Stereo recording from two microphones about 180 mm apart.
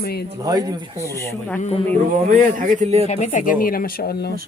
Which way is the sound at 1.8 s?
45° right (ahead or behind).